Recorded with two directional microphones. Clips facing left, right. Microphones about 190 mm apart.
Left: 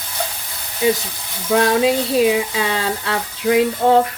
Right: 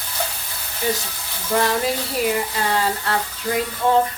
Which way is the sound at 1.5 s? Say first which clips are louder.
Left 5 dB; 85° left.